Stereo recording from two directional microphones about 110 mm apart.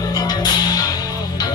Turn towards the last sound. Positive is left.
turn(degrees=35)  # may be behind; listen again after turning